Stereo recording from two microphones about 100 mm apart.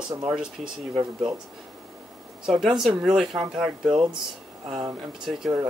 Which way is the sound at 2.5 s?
Centre (ahead or behind).